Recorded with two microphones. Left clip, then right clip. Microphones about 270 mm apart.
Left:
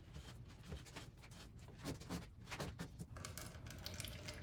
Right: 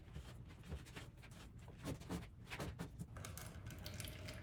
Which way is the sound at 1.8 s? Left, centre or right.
Centre.